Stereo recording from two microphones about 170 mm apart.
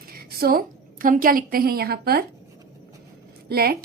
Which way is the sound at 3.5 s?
65° right (ahead or behind).